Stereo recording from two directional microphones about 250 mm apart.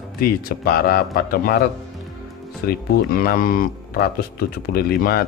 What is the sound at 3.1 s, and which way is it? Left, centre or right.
Speech, left.